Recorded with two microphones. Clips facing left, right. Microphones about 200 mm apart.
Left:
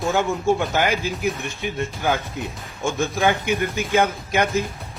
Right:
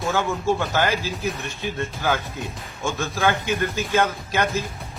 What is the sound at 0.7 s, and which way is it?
Speech, 15° left (ahead or behind).